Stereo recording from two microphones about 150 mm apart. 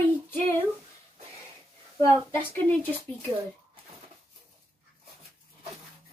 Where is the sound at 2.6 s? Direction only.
10° left (ahead or behind).